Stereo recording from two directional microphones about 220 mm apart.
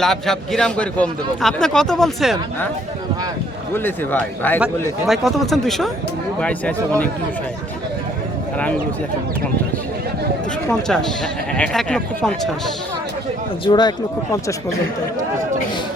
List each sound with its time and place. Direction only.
0.0 s a man's voice: centre (ahead or behind)
3.8 s a man's voice: 10° left (ahead or behind)
10.7 s a man's voice: centre (ahead or behind)
13.7 s speech: 20° left (ahead or behind)